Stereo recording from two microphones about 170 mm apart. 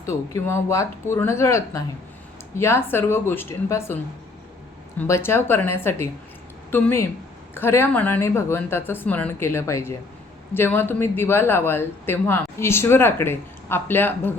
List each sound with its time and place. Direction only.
0.0 s speech: 15° left (ahead or behind)
4.9 s speech: 15° left (ahead or behind)